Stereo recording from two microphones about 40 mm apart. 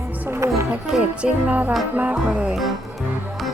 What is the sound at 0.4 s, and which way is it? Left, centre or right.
Music, right.